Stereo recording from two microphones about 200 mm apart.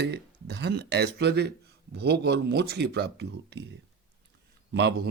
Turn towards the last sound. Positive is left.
turn(degrees=-55)  # may be behind; listen again after turning